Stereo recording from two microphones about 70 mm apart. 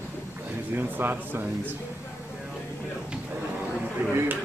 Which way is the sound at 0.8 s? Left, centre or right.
Right.